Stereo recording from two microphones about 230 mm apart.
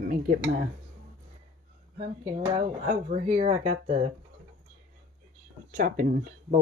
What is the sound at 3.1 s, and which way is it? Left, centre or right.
Speech, right.